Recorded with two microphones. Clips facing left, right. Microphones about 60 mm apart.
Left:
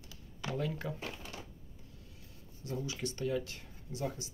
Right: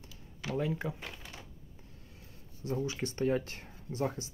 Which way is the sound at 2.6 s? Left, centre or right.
Right.